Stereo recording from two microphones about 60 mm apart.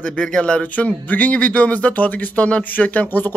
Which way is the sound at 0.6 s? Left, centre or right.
Left.